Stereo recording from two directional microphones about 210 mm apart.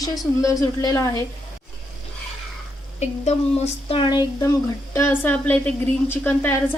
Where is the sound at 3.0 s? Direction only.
30° left (ahead or behind).